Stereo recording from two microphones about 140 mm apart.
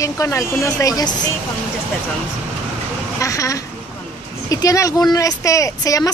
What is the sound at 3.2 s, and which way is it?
Speech, 25° left (ahead or behind).